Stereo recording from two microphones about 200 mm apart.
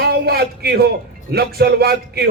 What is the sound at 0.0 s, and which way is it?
A man's voice, 50° right (ahead or behind).